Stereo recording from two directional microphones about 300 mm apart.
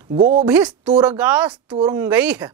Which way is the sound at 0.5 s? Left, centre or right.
Centre.